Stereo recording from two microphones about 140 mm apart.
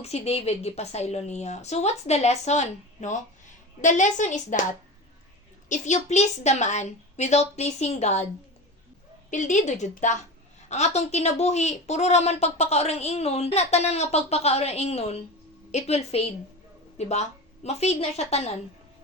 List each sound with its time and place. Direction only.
0.0 s a woman's voice: 50° left (ahead or behind)
5.6 s a woman's voice: 60° left (ahead or behind)
9.3 s a woman's voice: 60° left (ahead or behind)